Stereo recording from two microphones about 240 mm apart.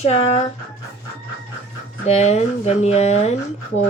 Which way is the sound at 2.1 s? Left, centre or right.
Left.